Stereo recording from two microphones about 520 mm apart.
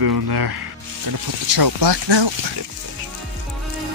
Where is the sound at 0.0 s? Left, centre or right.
Right.